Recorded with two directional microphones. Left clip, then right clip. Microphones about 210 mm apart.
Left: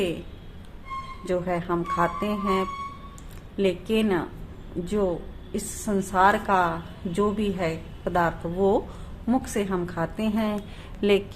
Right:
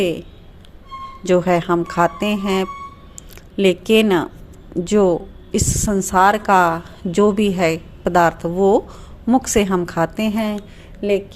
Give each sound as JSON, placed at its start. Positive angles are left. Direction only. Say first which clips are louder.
{"t": 1.2, "sound": "a woman's voice", "louder": "right 12 dB", "side_deg": -40}